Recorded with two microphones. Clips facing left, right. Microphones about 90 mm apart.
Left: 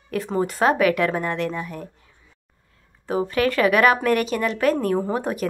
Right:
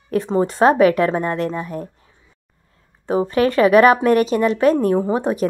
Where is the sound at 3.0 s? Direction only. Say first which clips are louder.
Right 4 dB; 30° right (ahead or behind).